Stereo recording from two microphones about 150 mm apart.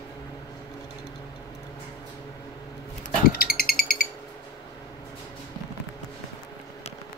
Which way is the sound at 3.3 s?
90° left.